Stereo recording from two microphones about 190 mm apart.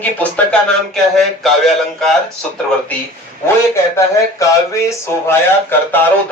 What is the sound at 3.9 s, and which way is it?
Speech, 15° left (ahead or behind).